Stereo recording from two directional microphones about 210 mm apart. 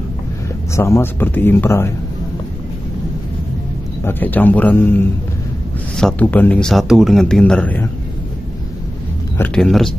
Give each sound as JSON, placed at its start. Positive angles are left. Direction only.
{"t": 0.7, "sound": "speech", "side_deg": 15}
{"t": 4.0, "sound": "speech", "side_deg": 10}
{"t": 9.4, "sound": "speech", "side_deg": 5}